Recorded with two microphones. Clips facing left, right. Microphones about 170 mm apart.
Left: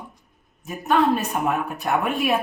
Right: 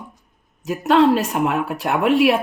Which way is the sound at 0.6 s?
90° right.